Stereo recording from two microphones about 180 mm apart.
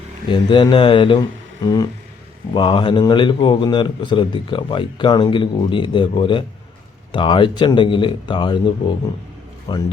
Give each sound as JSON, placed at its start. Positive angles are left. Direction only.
{"t": 0.3, "sound": "a man's voice", "side_deg": 25}